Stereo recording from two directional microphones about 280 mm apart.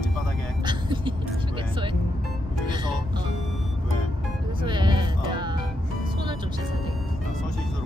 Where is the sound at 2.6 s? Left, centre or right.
Centre.